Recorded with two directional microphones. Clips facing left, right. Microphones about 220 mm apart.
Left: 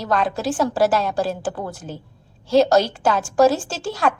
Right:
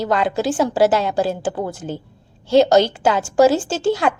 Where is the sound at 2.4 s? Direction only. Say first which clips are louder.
Right 2 dB; centre (ahead or behind).